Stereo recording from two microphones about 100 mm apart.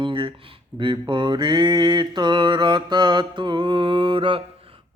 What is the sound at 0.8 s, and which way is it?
Mantra, 50° right (ahead or behind).